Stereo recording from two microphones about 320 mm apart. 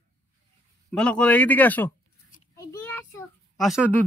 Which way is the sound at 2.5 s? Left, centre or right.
Centre.